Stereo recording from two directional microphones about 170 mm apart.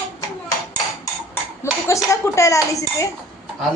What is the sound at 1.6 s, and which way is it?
Speech, 20° left (ahead or behind).